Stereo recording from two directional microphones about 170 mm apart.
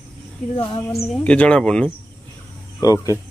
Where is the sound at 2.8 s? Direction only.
20° left (ahead or behind).